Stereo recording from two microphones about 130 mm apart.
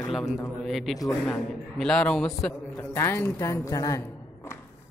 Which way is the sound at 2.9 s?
20° left (ahead or behind).